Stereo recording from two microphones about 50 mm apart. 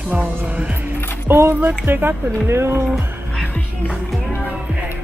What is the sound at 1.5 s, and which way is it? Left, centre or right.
Speech, right.